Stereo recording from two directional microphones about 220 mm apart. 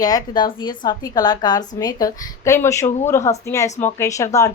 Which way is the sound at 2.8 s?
30° left (ahead or behind).